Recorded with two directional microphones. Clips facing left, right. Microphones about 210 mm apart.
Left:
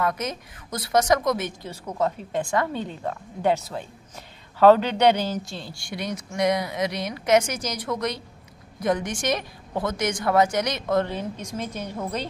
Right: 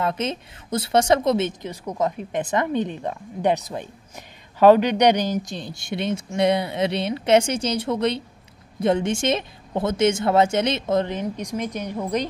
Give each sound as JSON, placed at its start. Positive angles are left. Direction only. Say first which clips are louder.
{"t": 0.0, "sound": "a woman's voice", "louder": "right 2 dB", "side_deg": -25}